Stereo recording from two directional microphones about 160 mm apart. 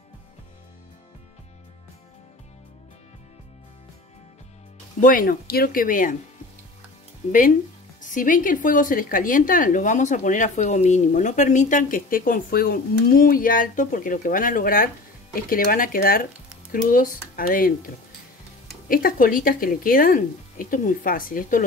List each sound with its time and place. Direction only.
5.0 s speech: 60° left (ahead or behind)
8.0 s speech: 55° left (ahead or behind)
18.9 s speech: 60° left (ahead or behind)